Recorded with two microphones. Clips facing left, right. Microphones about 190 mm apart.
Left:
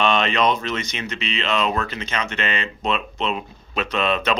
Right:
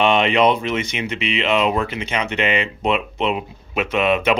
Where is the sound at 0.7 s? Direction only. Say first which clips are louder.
Right 4 dB; 15° right (ahead or behind).